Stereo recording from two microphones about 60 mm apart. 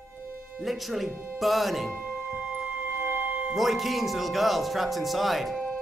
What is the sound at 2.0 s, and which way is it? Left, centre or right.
Music, right.